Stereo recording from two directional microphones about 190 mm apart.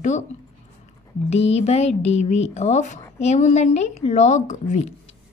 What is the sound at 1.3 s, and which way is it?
Speech, 35° left (ahead or behind).